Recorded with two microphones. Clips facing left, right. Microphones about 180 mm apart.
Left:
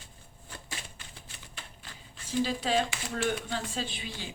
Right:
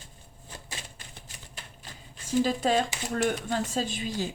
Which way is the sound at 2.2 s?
45° right (ahead or behind).